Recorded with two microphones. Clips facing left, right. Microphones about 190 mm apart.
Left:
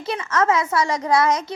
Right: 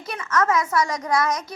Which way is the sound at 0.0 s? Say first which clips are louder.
Left 2 dB; 30° left (ahead or behind).